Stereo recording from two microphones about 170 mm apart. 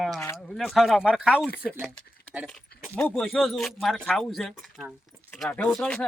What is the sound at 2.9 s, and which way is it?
Speech, 5° left (ahead or behind).